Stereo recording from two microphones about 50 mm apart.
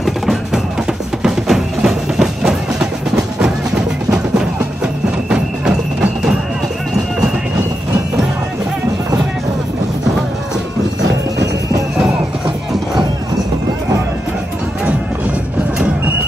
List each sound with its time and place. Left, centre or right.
0.0 s music: centre